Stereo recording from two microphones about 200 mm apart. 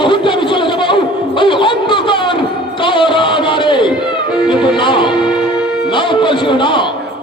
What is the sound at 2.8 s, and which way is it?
Music, 25° left (ahead or behind).